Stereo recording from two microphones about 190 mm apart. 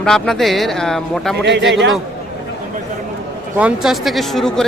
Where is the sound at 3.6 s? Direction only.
5° right (ahead or behind).